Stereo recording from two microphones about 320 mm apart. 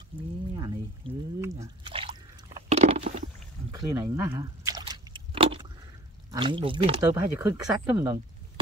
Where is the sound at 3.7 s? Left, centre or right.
Centre.